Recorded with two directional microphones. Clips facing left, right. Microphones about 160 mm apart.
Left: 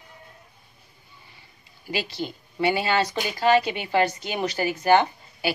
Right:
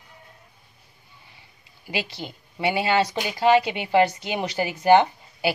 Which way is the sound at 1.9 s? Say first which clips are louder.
Left 1 dB; 20° right (ahead or behind).